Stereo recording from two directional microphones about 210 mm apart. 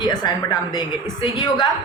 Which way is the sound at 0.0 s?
20° left (ahead or behind).